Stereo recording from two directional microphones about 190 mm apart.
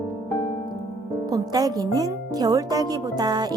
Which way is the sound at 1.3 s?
20° right (ahead or behind).